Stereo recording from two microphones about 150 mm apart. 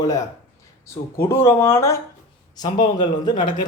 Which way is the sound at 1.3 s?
15° left (ahead or behind).